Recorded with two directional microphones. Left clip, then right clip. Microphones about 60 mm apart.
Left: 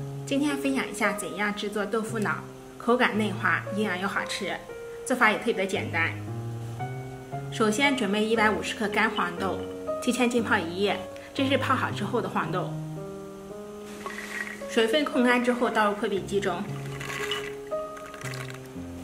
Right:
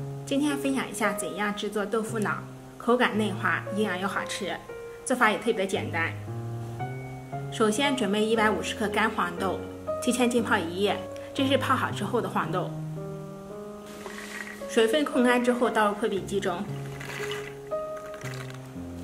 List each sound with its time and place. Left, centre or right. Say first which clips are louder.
0.3 s a woman's voice: even; centre
7.5 s a woman's voice: left 1 dB; centre
14.7 s a woman's voice: right 1 dB; right
17.1 s music: left 3 dB; centre